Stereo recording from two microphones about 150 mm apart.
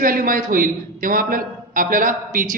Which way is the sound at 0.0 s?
65° right (ahead or behind).